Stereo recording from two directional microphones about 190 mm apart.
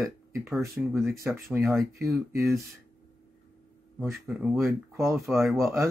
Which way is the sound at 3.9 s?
10° right (ahead or behind).